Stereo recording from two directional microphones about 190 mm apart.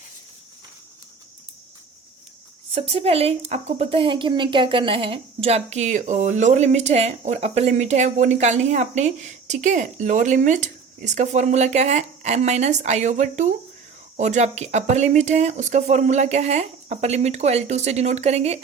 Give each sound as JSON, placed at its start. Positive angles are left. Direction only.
{"t": 2.7, "sound": "speech", "side_deg": -30}